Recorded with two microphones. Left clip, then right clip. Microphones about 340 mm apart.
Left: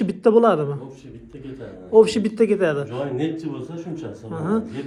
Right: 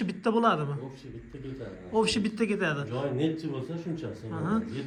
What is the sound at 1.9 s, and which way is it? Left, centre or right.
A man's voice, centre.